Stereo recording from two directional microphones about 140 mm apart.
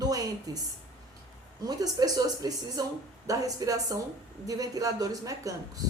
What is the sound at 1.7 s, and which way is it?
A woman's voice, 25° right (ahead or behind).